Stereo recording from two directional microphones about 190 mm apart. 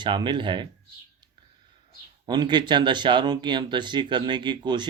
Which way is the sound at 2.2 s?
25° right (ahead or behind).